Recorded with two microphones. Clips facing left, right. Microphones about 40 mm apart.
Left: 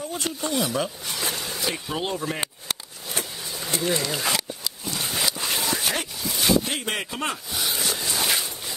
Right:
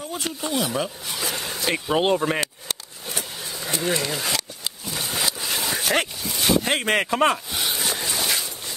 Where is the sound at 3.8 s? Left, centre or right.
Right.